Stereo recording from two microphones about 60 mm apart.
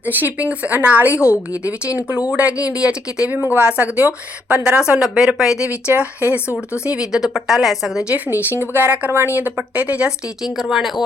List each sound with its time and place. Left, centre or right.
0.2 s a woman's voice: right
1.1 s a woman's voice: left
2.0 s a woman's voice: right
5.6 s a woman's voice: right
6.8 s a woman's voice: centre
8.1 s a woman's voice: right
10.4 s speech: centre